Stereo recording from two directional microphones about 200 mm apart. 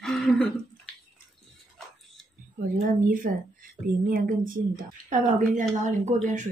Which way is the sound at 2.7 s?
45° right (ahead or behind).